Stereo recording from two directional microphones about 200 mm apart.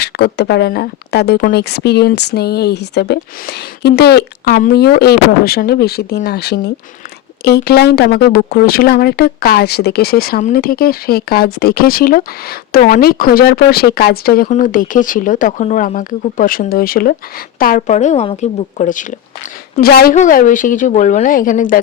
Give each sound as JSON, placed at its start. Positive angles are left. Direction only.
{"t": 0.0, "sound": "a woman's voice", "side_deg": 55}
{"t": 19.8, "sound": "speech", "side_deg": 50}
{"t": 20.1, "sound": "a woman's voice", "side_deg": 40}